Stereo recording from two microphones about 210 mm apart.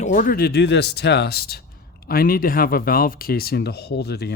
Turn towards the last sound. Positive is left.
turn(degrees=50)  # may be behind; listen again after turning